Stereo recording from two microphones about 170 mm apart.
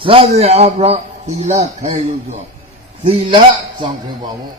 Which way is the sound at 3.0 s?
30° right (ahead or behind).